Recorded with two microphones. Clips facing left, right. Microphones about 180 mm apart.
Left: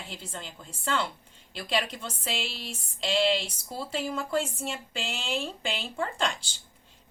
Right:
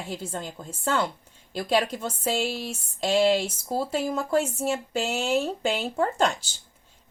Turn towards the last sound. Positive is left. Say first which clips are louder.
# right 6 dB
turn(degrees=-45)  # may be behind; listen again after turning